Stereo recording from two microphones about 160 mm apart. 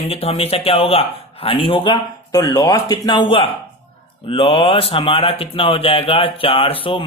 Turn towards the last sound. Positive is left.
turn(degrees=35)  # may be behind; listen again after turning